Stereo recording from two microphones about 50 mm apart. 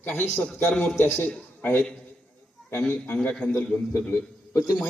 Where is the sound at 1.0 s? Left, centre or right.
Left.